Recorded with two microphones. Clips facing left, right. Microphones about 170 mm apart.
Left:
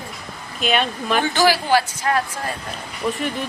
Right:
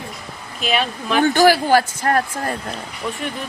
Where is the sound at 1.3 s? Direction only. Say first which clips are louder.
Right 4 dB; 50° right (ahead or behind).